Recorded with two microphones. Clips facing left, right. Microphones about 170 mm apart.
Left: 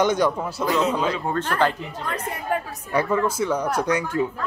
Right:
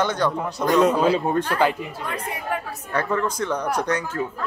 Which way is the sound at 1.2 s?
15° right (ahead or behind).